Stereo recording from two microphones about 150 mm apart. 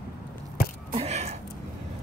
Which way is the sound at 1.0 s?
50° right (ahead or behind).